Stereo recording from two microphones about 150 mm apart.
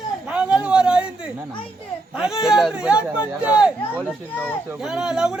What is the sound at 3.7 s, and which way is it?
Speech, 10° left (ahead or behind).